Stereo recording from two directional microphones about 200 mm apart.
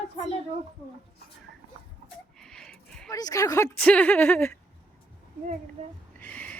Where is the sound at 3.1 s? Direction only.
15° left (ahead or behind).